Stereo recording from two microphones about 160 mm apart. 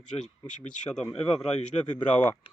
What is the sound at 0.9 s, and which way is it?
Speech, 5° left (ahead or behind).